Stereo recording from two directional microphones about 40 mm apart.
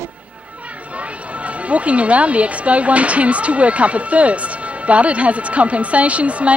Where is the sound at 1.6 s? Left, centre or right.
Right.